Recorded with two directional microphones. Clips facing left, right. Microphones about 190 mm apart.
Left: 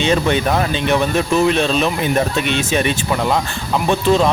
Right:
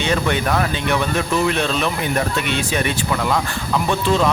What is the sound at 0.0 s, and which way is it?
Speech, 25° left (ahead or behind).